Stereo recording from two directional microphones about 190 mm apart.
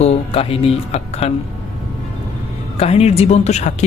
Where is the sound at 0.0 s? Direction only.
35° left (ahead or behind).